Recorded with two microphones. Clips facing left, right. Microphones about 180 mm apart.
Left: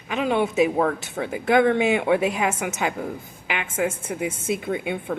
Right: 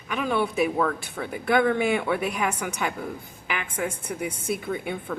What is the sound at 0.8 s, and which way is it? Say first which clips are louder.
Speech: left 3 dB; 40° left (ahead or behind).